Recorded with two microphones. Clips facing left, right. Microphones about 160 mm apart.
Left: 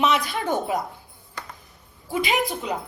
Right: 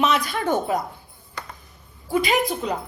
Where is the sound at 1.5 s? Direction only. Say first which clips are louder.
Even; centre (ahead or behind).